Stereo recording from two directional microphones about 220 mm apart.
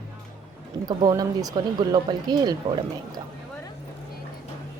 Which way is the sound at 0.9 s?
15° right (ahead or behind).